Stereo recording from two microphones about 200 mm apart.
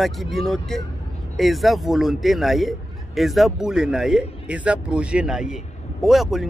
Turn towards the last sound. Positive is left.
turn(degrees=0)  # may be behind; listen again after turning